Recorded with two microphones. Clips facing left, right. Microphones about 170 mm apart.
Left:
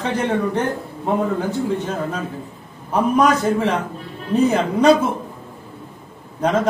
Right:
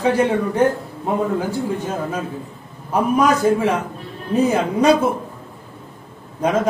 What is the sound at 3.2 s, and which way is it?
A man's voice, 5° right (ahead or behind).